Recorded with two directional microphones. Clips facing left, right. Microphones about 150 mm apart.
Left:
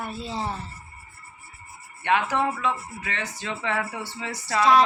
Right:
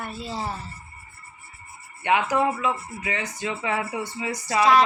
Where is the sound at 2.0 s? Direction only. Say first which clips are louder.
Right 2 dB; 15° right (ahead or behind).